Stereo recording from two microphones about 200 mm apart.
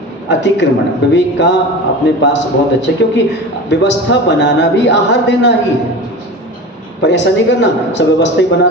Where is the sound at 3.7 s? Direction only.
60° left (ahead or behind).